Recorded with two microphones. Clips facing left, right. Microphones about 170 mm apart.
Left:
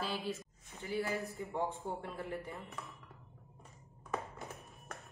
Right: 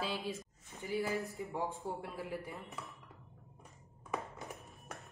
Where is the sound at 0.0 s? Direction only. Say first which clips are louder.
Even; centre (ahead or behind).